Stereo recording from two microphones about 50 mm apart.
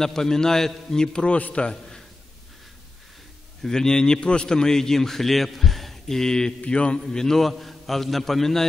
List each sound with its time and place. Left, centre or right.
0.0 s a man's voice: centre
3.6 s a man's voice: centre
7.1 s a man's voice: centre